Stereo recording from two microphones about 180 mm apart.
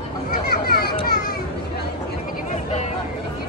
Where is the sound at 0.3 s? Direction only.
60° left (ahead or behind).